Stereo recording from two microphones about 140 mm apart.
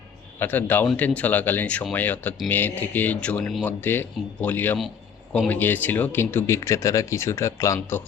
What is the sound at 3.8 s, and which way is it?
Speech, 15° left (ahead or behind).